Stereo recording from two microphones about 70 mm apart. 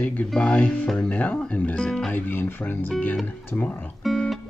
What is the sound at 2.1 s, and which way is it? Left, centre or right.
Speech, left.